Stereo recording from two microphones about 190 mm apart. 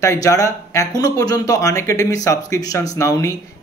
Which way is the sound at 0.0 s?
15° left (ahead or behind).